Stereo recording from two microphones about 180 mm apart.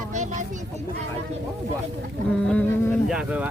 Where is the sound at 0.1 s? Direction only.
40° right (ahead or behind).